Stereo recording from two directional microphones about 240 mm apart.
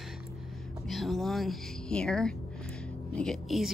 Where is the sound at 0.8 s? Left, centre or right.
Centre.